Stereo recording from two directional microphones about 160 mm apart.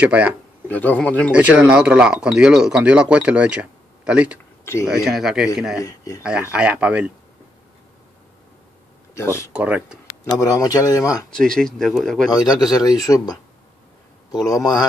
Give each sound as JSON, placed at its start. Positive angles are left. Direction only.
{"t": 0.0, "sound": "speech", "side_deg": -10}
{"t": 0.7, "sound": "a man's voice", "side_deg": 10}
{"t": 1.3, "sound": "speech", "side_deg": -10}
{"t": 5.8, "sound": "a man's voice", "side_deg": 20}
{"t": 6.2, "sound": "speech", "side_deg": -5}
{"t": 9.1, "sound": "speech", "side_deg": 15}
{"t": 9.5, "sound": "speech", "side_deg": -10}
{"t": 10.2, "sound": "a man's voice", "side_deg": 20}
{"t": 11.2, "sound": "speech", "side_deg": 5}
{"t": 12.3, "sound": "a man's voice", "side_deg": 25}